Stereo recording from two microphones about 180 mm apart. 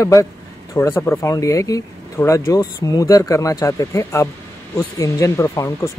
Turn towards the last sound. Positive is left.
turn(degrees=15)  # may be behind; listen again after turning